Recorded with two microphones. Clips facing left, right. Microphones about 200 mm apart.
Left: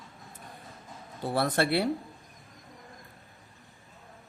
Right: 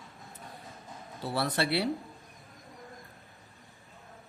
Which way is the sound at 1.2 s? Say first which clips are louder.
Left 4 dB; 50° left (ahead or behind).